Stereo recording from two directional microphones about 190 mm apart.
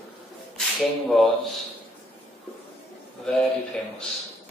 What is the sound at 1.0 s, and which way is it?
Speech, centre (ahead or behind).